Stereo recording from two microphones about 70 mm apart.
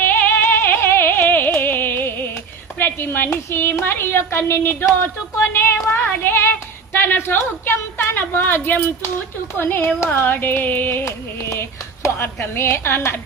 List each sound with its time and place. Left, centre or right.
0.0 s music: left
2.7 s a woman's voice: left
9.6 s a sound: left
11.0 s carnatic music: left
12.0 s a woman's voice: left